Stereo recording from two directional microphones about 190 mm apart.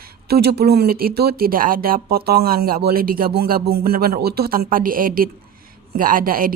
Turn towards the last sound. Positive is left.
turn(degrees=-50)  # may be behind; listen again after turning